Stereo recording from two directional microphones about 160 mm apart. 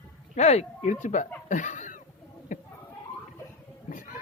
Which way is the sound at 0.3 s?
45° left (ahead or behind).